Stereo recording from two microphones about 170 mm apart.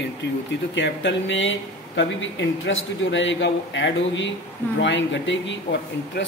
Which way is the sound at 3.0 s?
90° left.